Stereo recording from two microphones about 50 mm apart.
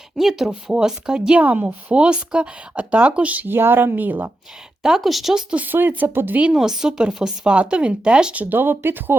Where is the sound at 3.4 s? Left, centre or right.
Right.